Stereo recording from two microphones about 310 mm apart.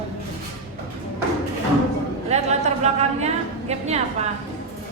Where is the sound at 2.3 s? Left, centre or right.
Right.